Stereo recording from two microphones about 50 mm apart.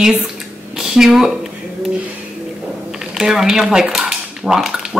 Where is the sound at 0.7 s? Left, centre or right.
Centre.